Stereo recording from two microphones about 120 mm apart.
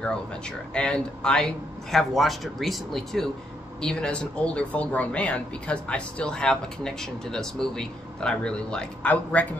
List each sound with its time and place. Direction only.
0.7 s speech: 10° left (ahead or behind)